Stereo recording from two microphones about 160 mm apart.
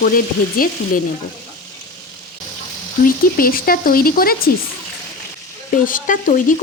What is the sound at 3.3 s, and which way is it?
A woman's voice, 65° left (ahead or behind).